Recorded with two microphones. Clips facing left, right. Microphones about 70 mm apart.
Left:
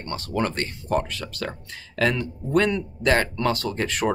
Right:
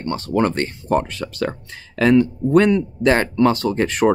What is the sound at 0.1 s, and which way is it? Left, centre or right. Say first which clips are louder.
Speech: right 7 dB; right.